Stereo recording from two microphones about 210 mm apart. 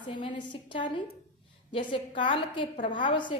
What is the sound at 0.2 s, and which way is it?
A woman's voice, 25° left (ahead or behind).